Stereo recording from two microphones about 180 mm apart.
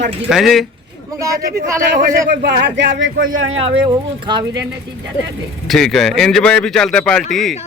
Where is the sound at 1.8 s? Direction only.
65° right (ahead or behind).